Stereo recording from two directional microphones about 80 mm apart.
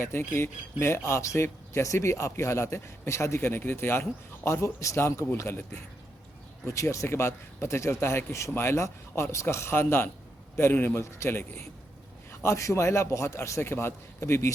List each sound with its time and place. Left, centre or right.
0.0 s speech: left